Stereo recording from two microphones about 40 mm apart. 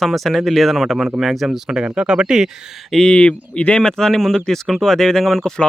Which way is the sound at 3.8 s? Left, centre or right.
Centre.